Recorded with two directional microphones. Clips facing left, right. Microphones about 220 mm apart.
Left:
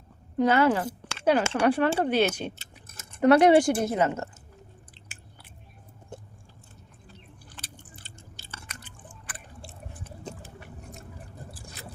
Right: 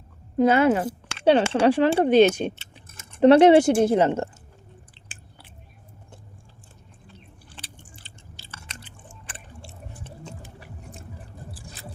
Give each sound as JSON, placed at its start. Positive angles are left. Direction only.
{"t": 0.3, "sound": "a woman's voice", "side_deg": -25}
{"t": 5.0, "sound": "chewing", "side_deg": 5}
{"t": 7.5, "sound": "chewing", "side_deg": 50}
{"t": 9.0, "sound": "a sound", "side_deg": -25}